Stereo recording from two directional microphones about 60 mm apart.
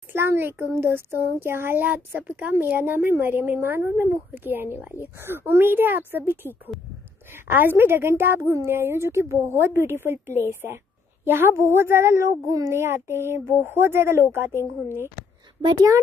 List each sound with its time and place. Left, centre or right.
0.1 s speech: right